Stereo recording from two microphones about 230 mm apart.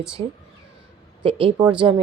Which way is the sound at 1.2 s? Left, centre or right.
Right.